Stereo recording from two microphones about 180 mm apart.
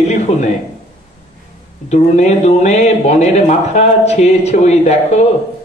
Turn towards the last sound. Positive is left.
turn(degrees=40)  # may be behind; listen again after turning